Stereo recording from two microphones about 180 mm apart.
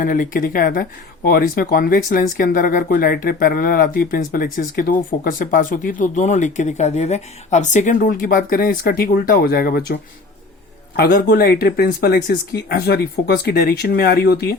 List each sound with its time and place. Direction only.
0.0 s speech: 50° left (ahead or behind)